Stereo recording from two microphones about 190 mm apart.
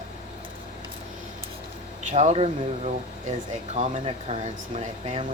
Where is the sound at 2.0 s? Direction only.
40° right (ahead or behind).